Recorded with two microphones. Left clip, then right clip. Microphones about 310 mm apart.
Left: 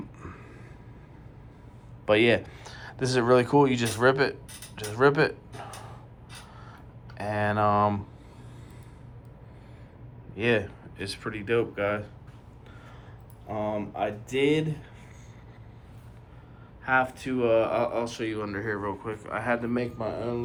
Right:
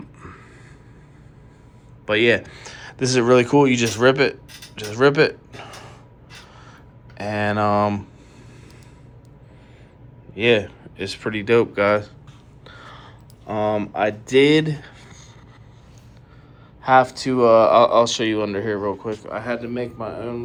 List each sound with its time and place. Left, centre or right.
0.2 s a sound: centre
2.0 s speech: centre
7.2 s speech: centre
10.3 s speech: centre
13.5 s speech: right
16.8 s speech: right
19.6 s a man's voice: centre
20.1 s speech: right